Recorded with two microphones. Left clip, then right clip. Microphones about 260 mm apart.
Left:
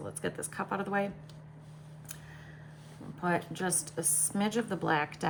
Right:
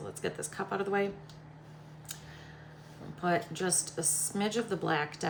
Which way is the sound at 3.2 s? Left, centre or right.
Centre.